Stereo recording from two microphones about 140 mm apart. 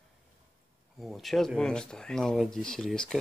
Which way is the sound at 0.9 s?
Centre (ahead or behind).